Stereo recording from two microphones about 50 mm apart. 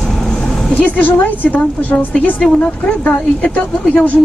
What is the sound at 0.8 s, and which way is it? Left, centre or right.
A woman's voice, left.